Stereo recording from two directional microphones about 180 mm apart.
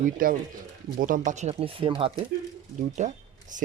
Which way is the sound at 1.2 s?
40° right (ahead or behind).